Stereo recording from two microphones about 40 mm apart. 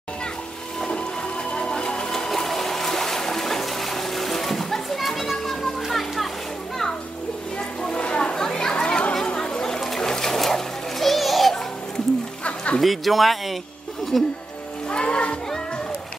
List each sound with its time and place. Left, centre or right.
0.8 s music: left; by 6.2 s centre
7.5 s a sound: left
8.5 s chatter: left
9.4 s splash: centre
12.4 s music: left
12.8 s speech: centre
14.9 s music: left